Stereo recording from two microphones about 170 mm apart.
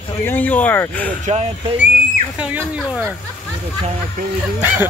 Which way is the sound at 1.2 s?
40° right (ahead or behind).